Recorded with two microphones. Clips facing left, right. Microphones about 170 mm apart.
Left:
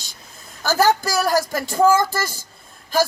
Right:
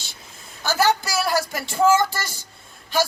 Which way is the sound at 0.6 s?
40° left (ahead or behind).